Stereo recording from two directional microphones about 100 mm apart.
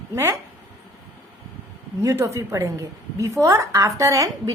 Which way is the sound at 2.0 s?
30° right (ahead or behind).